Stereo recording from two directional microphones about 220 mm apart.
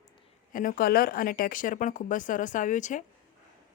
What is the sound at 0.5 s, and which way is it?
Speech, 40° left (ahead or behind).